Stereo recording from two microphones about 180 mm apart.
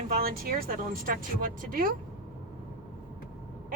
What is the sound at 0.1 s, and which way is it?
Speech, 55° right (ahead or behind).